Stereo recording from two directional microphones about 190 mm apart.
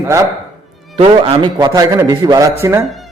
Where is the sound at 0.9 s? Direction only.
30° right (ahead or behind).